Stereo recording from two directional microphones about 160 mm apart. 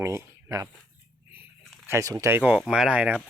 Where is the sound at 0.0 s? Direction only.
15° right (ahead or behind).